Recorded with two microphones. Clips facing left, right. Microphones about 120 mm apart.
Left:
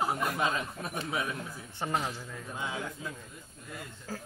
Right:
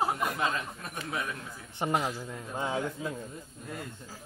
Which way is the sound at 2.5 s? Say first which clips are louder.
Right 5 dB; 35° right (ahead or behind).